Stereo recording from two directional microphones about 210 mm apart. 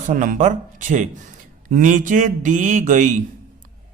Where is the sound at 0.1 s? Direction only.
40° right (ahead or behind).